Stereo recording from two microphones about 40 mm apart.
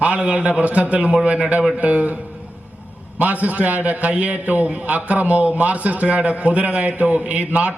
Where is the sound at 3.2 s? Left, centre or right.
Right.